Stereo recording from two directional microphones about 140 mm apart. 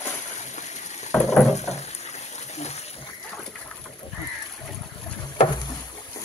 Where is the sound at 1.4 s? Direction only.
55° left (ahead or behind).